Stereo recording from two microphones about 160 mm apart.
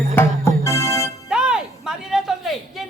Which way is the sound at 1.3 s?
5° right (ahead or behind).